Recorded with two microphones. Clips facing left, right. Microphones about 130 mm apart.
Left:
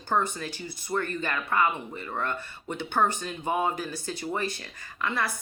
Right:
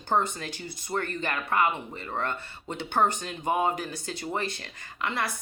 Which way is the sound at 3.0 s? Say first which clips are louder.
Right 1 dB; 55° right (ahead or behind).